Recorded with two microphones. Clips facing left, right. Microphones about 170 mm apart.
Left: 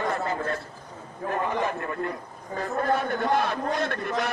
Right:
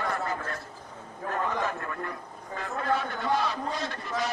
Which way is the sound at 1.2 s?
15° left (ahead or behind).